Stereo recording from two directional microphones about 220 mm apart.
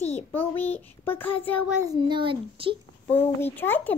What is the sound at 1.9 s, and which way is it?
Speech, 20° right (ahead or behind).